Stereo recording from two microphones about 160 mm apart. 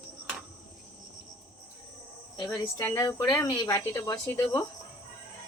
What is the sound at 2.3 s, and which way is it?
A woman's voice, 25° left (ahead or behind).